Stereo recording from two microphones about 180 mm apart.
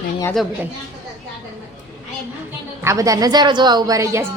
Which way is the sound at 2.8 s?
15° right (ahead or behind).